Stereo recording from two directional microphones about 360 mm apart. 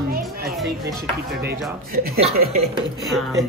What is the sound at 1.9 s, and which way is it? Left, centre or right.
Speech, right.